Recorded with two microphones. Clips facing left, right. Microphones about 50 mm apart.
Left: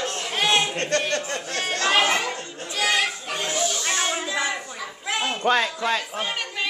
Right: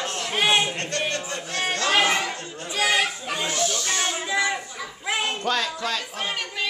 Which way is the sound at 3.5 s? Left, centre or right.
Centre.